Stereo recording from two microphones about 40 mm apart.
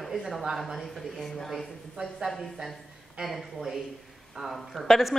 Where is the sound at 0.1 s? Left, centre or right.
Centre.